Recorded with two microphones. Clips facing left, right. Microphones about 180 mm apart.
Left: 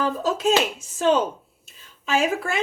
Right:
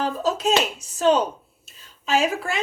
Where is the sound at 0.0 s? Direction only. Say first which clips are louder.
Left 1 dB; 50° left (ahead or behind).